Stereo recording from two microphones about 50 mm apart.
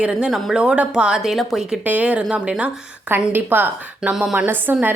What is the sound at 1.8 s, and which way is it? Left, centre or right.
Speech, right.